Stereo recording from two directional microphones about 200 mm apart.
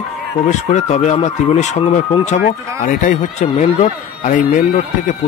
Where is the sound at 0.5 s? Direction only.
35° left (ahead or behind).